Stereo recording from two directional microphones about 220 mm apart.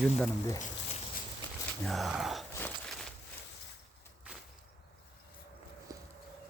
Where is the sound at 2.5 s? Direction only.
10° left (ahead or behind).